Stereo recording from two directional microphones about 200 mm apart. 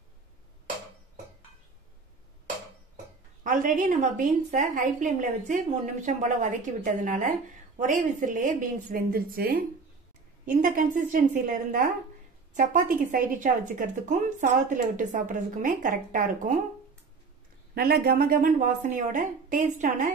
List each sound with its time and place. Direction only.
3.4 s a woman's voice: 40° right (ahead or behind)
12.5 s a woman's voice: 45° right (ahead or behind)
17.7 s a woman's voice: 50° right (ahead or behind)